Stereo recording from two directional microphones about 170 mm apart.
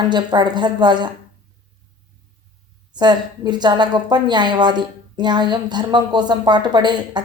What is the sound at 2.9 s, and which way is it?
A woman's voice, 25° right (ahead or behind).